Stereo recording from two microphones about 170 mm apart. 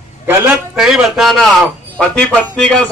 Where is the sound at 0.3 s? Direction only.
10° right (ahead or behind).